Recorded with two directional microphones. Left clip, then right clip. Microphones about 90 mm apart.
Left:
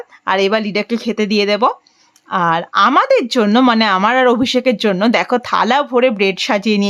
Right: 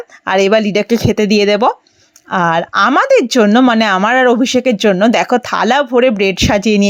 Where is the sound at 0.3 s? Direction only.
45° right (ahead or behind).